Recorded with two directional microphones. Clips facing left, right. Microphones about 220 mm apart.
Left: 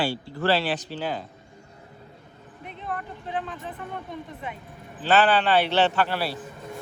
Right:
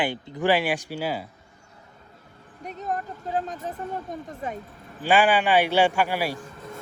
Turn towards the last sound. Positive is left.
turn(degrees=-10)  # may be behind; listen again after turning